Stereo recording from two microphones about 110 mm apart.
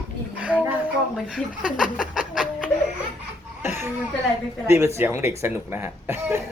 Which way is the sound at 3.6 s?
25° right (ahead or behind).